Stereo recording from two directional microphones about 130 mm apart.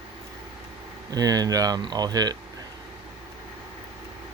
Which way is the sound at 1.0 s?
30° right (ahead or behind).